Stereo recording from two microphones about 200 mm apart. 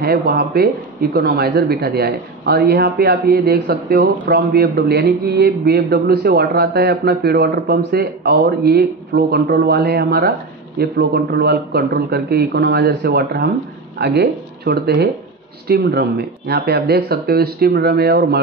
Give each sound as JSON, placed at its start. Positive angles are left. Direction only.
{"t": 0.0, "sound": "speech", "side_deg": -50}